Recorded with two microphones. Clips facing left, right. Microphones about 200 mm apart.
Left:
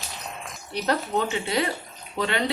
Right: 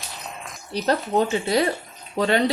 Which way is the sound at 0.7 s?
35° right (ahead or behind).